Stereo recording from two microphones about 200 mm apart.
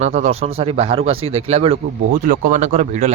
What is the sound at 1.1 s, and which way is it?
Speech, 90° right.